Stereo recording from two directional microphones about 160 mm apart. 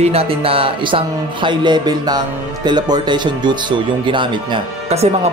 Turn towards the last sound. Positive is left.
turn(degrees=-35)  # may be behind; listen again after turning